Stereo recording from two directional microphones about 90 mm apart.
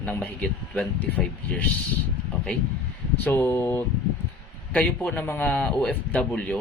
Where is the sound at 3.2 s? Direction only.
25° left (ahead or behind).